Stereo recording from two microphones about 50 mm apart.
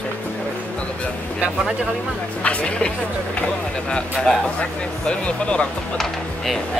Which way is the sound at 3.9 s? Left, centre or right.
Centre.